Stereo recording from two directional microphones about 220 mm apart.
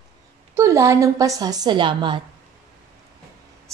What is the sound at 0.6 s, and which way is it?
A woman's voice, 15° right (ahead or behind).